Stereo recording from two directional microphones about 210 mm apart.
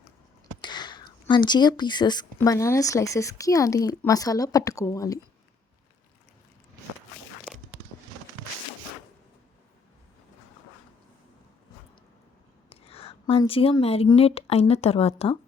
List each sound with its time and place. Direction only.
0.6 s speech: 20° left (ahead or behind)
12.7 s a woman's voice: 30° left (ahead or behind)